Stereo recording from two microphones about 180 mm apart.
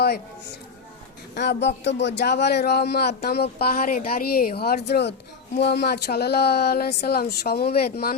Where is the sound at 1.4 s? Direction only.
70° left (ahead or behind).